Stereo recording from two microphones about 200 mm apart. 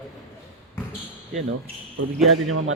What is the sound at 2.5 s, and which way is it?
Speech, 90° right.